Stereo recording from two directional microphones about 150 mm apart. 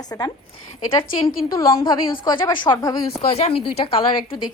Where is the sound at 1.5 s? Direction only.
35° left (ahead or behind).